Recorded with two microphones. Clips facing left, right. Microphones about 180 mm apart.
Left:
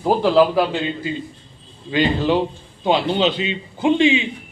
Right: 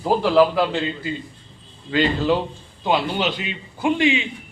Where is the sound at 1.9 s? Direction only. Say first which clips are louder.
Left 1 dB; 20° left (ahead or behind).